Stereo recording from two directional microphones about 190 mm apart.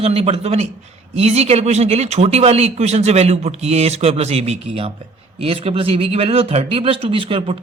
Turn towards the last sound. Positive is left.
turn(degrees=-30)  # may be behind; listen again after turning